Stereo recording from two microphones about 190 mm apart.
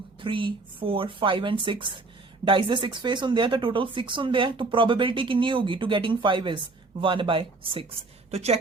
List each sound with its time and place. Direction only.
0.2 s speech: 25° right (ahead or behind)